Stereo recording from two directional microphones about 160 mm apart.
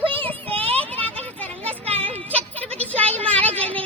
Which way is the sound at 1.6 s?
40° right (ahead or behind).